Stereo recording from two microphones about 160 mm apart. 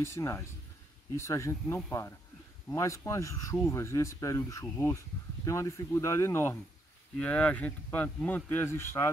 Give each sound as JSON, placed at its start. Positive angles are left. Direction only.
{"t": 0.0, "sound": "speech", "side_deg": 15}